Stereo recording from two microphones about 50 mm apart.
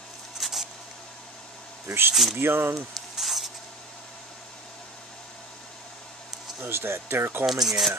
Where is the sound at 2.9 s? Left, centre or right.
Centre.